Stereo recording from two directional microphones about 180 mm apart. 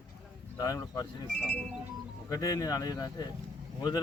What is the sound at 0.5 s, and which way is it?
Speech, 20° left (ahead or behind).